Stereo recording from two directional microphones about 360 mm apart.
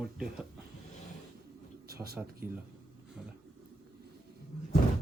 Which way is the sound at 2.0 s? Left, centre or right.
Right.